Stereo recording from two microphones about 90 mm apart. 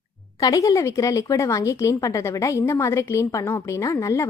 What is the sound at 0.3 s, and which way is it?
A woman's voice, 40° left (ahead or behind).